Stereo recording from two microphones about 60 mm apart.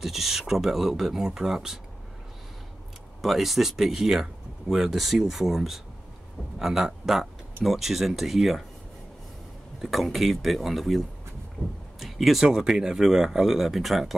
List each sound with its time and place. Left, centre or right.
0.0 s speech: centre
3.2 s speech: centre
9.8 s speech: centre
12.0 s a sound: centre
12.4 s speech: centre